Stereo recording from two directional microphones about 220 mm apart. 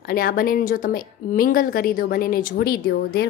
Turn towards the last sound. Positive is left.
turn(degrees=45)  # may be behind; listen again after turning